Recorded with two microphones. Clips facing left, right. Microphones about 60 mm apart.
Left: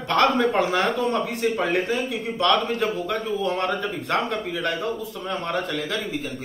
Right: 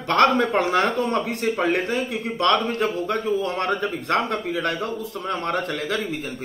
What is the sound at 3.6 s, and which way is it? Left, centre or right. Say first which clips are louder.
A man's voice: right 1 dB; right.